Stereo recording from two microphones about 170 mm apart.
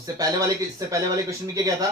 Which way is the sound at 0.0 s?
20° right (ahead or behind).